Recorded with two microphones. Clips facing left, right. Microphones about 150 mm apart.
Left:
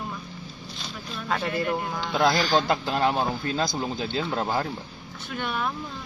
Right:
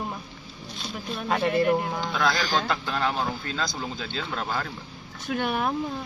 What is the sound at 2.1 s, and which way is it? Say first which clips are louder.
Speech: left 5 dB; 25° left (ahead or behind).